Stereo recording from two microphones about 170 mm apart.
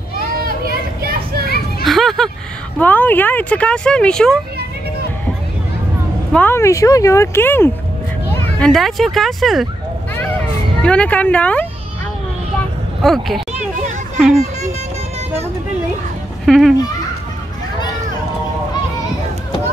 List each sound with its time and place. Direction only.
0.4 s children playing: 60° right (ahead or behind)
1.4 s children playing: 65° left (ahead or behind)
1.9 s a sound: centre (ahead or behind)
2.8 s speech: 10° left (ahead or behind)
6.3 s a child's voice: 15° left (ahead or behind)
10.8 s speech: 5° left (ahead or behind)
12.5 s a sound: centre (ahead or behind)
16.4 s a child's voice: centre (ahead or behind)